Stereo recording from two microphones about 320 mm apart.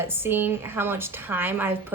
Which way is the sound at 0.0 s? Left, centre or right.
Centre.